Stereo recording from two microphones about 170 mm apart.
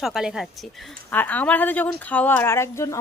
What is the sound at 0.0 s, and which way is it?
A woman's voice, centre (ahead or behind).